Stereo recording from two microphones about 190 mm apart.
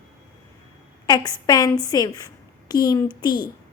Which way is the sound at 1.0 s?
20° left (ahead or behind).